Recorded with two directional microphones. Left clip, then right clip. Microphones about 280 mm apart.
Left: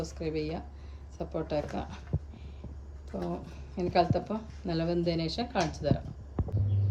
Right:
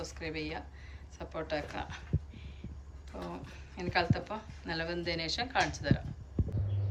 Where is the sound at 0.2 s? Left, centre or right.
Centre.